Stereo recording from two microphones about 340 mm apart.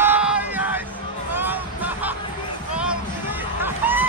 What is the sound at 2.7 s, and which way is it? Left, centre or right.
Music, centre.